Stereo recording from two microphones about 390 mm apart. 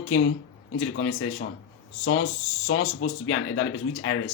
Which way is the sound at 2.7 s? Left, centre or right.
Left.